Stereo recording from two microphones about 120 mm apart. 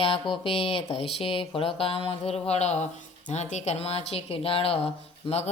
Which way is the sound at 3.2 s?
75° left (ahead or behind).